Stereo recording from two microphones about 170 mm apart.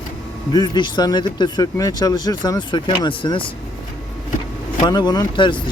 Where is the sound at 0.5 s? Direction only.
25° left (ahead or behind).